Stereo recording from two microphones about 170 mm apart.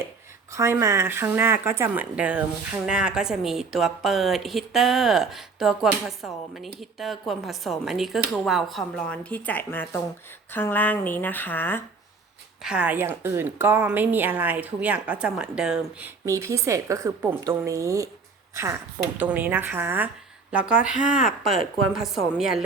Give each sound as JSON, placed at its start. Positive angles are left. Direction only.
{"t": 0.5, "sound": "a woman's voice", "side_deg": -15}
{"t": 12.6, "sound": "a woman's voice", "side_deg": -5}